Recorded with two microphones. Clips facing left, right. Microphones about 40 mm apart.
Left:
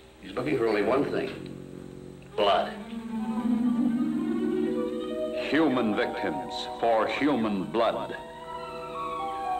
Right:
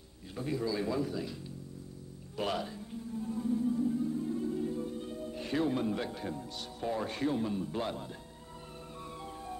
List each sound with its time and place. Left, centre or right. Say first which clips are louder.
0.3 s a man's voice: left 9 dB; left
2.3 s music: left 11 dB; left